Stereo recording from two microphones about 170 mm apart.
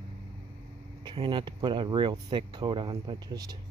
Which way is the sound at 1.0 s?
30° right (ahead or behind).